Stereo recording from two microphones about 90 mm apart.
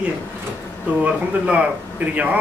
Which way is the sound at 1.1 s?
15° right (ahead or behind).